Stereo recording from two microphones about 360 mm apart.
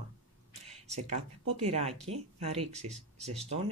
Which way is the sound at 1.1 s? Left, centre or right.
Centre.